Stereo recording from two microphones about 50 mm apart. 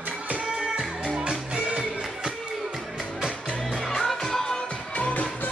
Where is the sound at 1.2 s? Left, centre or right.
Right.